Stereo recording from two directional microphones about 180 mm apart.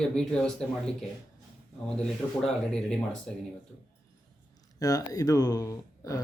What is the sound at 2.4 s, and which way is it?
Speech, 5° left (ahead or behind).